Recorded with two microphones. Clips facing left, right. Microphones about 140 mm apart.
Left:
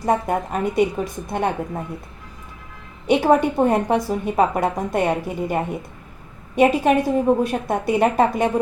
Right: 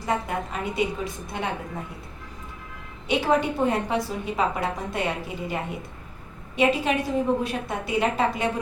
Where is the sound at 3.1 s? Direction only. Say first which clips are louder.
Left 6 dB; 45° left (ahead or behind).